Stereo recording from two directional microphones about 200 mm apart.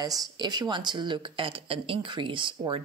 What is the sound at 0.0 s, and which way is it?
Speech, 20° right (ahead or behind).